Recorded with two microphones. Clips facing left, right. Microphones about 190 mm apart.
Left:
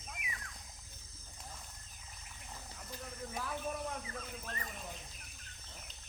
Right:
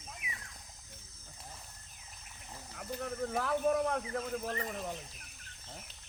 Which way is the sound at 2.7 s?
65° right (ahead or behind).